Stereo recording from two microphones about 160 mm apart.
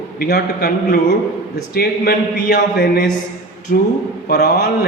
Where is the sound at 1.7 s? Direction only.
70° left (ahead or behind).